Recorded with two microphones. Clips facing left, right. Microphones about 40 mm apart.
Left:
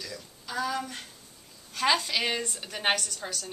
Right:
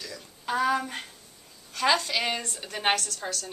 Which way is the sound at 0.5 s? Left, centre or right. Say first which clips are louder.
Right 6 dB; right.